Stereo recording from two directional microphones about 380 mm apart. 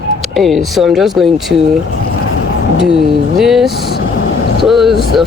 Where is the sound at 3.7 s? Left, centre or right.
Left.